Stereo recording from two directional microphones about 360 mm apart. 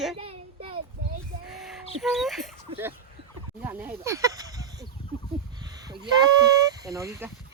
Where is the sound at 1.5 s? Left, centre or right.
Centre.